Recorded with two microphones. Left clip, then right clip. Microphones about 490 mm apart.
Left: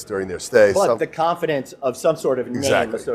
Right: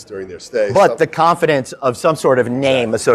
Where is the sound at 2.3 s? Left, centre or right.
Right.